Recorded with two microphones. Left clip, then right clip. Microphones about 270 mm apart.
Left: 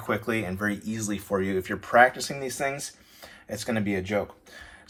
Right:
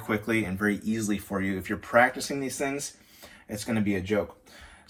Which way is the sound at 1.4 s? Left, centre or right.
Left.